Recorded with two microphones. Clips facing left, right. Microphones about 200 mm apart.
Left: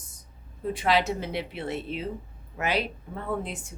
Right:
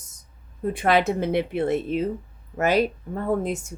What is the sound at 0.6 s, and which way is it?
Speech, 55° right (ahead or behind).